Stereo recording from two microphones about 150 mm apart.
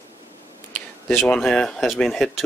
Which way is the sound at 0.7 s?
5° left (ahead or behind).